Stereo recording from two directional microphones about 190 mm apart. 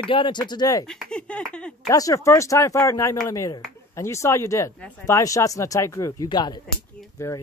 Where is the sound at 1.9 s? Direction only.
20° left (ahead or behind).